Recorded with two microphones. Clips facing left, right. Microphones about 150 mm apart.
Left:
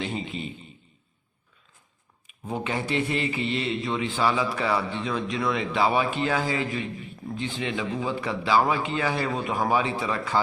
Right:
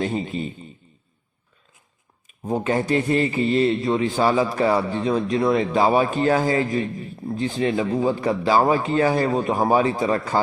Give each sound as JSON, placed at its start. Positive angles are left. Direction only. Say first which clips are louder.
{"t": 0.0, "sound": "a man's voice", "louder": "right 6 dB", "side_deg": -40}
{"t": 2.2, "sound": "a man's voice", "louder": "right 7 dB", "side_deg": -40}